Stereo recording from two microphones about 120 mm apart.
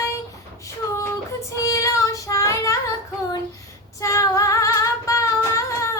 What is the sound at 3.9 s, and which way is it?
Female singing, 25° left (ahead or behind).